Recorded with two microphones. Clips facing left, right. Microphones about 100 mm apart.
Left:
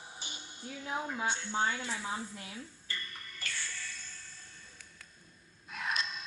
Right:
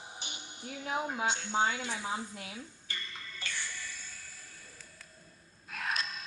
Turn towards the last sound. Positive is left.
turn(degrees=0)  # may be behind; listen again after turning